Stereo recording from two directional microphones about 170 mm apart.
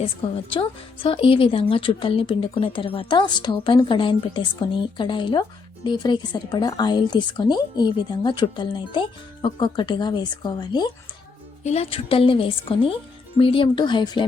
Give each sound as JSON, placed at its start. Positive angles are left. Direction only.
{"t": 0.5, "sound": "speech", "side_deg": 30}
{"t": 11.6, "sound": "speech", "side_deg": 40}